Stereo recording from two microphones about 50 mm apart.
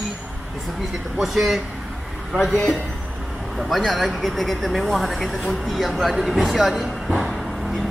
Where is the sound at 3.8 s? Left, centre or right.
Centre.